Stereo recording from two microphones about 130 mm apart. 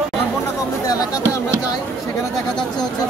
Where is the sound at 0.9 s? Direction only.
30° left (ahead or behind).